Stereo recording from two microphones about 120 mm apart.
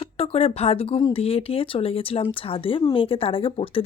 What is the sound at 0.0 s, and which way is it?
Speech, 55° left (ahead or behind).